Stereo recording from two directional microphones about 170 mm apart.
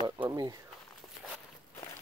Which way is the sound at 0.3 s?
20° right (ahead or behind).